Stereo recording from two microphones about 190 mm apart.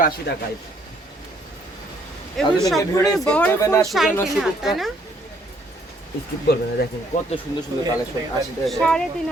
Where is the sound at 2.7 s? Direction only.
20° left (ahead or behind).